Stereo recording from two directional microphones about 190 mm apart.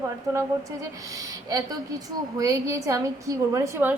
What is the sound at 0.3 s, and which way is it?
A woman's voice, 15° right (ahead or behind).